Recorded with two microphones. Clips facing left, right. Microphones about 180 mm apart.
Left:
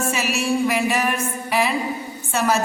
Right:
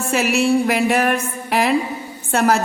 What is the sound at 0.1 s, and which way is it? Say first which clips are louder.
Speech: right 11 dB; 60° right (ahead or behind).